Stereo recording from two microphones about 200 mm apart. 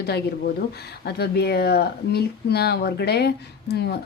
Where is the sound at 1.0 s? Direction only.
55° left (ahead or behind).